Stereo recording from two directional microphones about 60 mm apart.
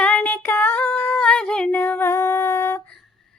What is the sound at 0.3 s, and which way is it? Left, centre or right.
Female singing, left.